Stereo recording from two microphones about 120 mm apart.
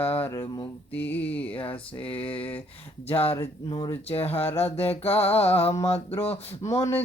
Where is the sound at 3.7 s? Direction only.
45° left (ahead or behind).